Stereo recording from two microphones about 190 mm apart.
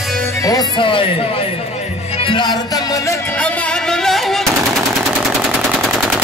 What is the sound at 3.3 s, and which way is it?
Music, 5° left (ahead or behind).